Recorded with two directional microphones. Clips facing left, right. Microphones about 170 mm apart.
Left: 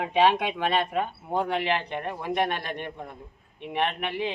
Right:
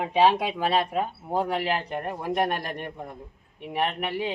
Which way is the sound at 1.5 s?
40° right (ahead or behind).